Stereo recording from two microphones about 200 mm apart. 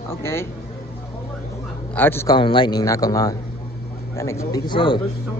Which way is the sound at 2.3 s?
25° left (ahead or behind).